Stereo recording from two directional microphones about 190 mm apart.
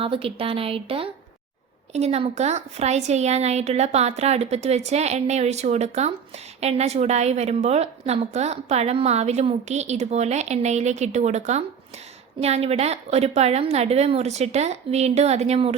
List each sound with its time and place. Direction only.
0.0 s a woman's voice: 30° right (ahead or behind)